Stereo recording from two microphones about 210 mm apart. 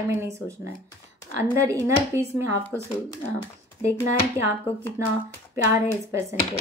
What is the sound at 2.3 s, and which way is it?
Speech, 10° right (ahead or behind).